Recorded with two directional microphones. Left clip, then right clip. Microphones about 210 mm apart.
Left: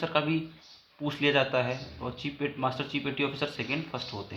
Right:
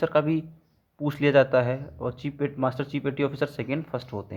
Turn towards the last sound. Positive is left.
turn(degrees=-55)  # may be behind; listen again after turning